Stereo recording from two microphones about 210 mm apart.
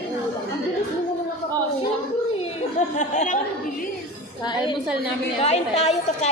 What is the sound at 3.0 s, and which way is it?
Speech, 35° left (ahead or behind).